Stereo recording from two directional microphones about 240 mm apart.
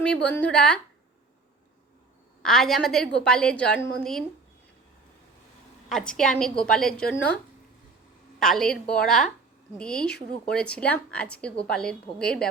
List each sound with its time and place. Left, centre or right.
0.0 s a woman's voice: centre
2.4 s a woman's voice: centre
5.9 s a woman's voice: centre
8.4 s a woman's voice: centre